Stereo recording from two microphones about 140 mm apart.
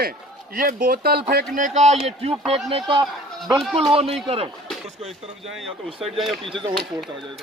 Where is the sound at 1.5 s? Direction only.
60° right (ahead or behind); by 3.0 s 40° right (ahead or behind).